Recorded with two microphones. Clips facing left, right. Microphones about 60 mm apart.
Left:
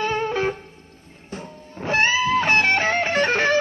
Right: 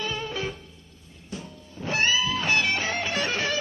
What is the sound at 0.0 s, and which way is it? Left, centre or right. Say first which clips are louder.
Music: left 8 dB; left.